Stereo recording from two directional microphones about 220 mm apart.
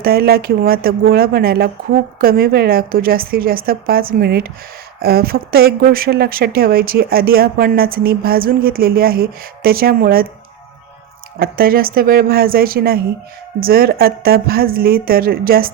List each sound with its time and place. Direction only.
0.0 s speech: 45° right (ahead or behind)
11.3 s speech: 40° right (ahead or behind)